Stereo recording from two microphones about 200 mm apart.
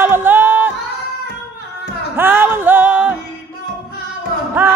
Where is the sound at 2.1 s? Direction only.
10° right (ahead or behind).